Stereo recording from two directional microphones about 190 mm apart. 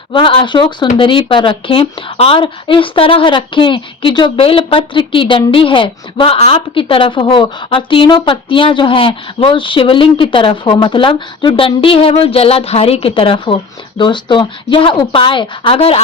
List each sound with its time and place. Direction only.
0.1 s speech: 25° left (ahead or behind)